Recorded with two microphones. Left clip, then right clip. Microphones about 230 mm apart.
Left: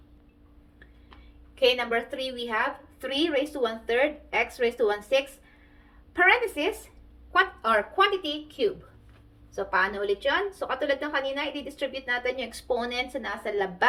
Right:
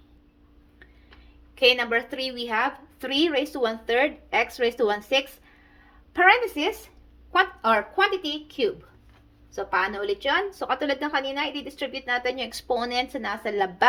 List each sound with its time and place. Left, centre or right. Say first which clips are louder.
1.5 s a woman's voice: right 3 dB; right